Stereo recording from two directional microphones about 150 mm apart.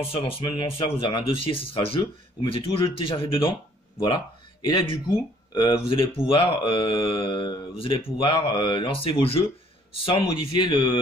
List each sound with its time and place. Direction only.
0.1 s speech: 35° left (ahead or behind)
4.6 s speech: 35° left (ahead or behind)